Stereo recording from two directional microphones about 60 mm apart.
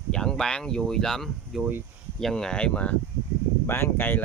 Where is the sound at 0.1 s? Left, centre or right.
Centre.